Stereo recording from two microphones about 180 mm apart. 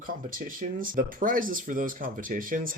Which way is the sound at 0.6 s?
50° right (ahead or behind).